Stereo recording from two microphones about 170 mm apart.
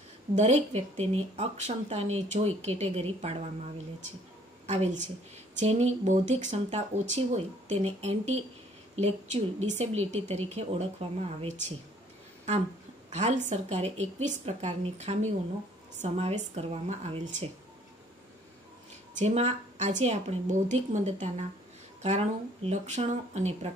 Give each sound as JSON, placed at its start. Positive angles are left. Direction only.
{"t": 0.4, "sound": "speech", "side_deg": -40}
{"t": 4.6, "sound": "speech", "side_deg": -40}
{"t": 13.1, "sound": "speech", "side_deg": -40}
{"t": 19.1, "sound": "a woman's voice", "side_deg": -40}